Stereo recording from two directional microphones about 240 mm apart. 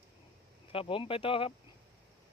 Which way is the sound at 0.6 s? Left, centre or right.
Left.